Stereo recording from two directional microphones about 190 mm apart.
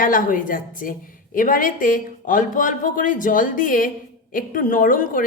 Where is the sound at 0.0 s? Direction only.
45° left (ahead or behind).